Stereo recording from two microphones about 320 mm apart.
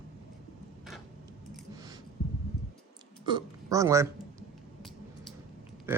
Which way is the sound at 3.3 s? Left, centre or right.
Centre.